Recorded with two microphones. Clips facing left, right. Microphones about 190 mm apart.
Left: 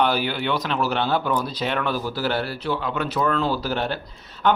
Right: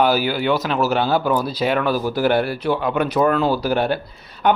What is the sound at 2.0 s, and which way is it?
Speech, 50° right (ahead or behind).